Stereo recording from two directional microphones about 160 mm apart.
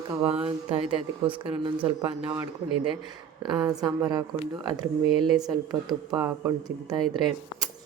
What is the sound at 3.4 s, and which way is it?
Speech, 25° right (ahead or behind).